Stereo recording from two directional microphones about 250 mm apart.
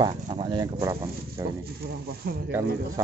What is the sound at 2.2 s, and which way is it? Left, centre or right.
Speech, right.